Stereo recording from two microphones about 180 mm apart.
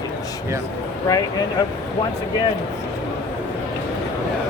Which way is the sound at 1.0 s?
20° left (ahead or behind).